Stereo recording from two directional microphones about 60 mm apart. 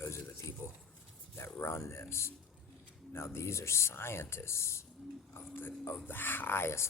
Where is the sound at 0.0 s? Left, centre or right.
Left.